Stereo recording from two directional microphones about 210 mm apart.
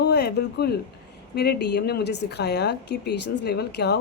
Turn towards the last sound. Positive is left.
turn(degrees=50)  # may be behind; listen again after turning